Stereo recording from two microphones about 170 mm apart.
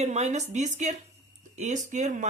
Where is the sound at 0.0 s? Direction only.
40° right (ahead or behind).